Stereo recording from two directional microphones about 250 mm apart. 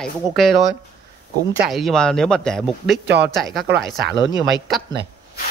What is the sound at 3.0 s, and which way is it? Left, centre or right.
Speech, right.